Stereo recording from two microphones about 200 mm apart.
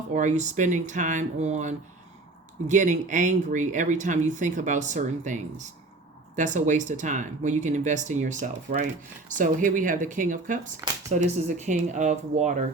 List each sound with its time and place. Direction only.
0.1 s speech: 35° right (ahead or behind)